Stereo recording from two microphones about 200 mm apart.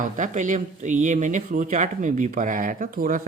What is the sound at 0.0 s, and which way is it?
Speech, 40° right (ahead or behind).